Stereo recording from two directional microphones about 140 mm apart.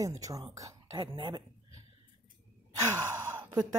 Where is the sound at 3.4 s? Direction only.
30° right (ahead or behind).